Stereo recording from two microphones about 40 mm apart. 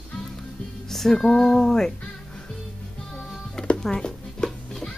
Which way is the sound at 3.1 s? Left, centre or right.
Centre.